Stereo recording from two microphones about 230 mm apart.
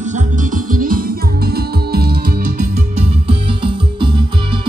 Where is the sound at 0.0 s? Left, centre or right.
Right.